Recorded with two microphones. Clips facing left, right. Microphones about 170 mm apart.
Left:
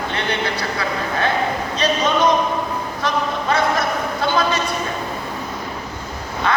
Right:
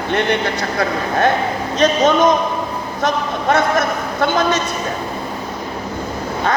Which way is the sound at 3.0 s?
45° right (ahead or behind).